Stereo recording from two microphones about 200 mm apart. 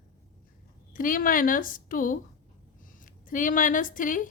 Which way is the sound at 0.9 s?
45° left (ahead or behind).